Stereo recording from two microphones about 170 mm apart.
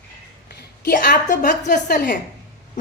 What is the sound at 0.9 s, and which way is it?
A woman's voice, 55° left (ahead or behind).